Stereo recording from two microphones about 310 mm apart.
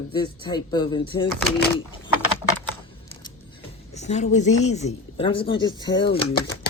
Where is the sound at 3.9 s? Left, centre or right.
Left.